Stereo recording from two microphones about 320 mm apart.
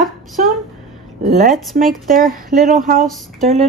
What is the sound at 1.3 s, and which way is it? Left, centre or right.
Speech, right.